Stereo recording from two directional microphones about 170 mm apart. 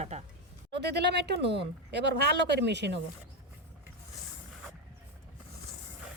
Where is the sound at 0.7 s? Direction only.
80° right.